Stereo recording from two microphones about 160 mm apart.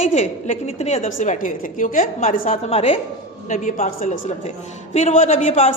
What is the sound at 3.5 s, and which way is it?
A man's voice, 50° left (ahead or behind).